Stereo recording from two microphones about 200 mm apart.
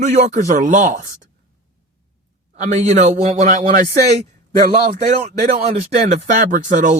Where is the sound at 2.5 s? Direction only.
35° right (ahead or behind).